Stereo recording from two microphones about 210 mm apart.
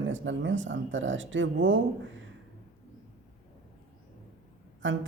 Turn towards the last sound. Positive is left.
turn(degrees=-65)  # may be behind; listen again after turning